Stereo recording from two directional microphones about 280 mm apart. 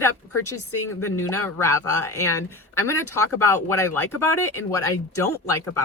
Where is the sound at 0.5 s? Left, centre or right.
Left.